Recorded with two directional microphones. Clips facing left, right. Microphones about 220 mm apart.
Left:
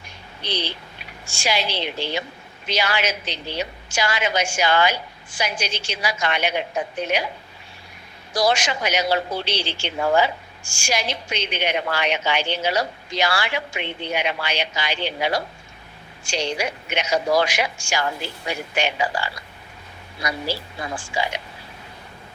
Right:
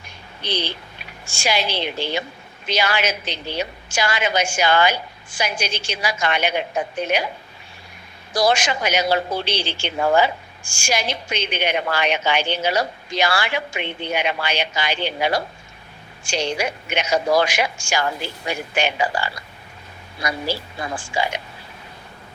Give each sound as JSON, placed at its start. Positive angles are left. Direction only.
{"t": 0.4, "sound": "a woman's voice", "side_deg": -50}
{"t": 8.3, "sound": "a woman's voice", "side_deg": -50}
{"t": 20.2, "sound": "a woman's voice", "side_deg": -50}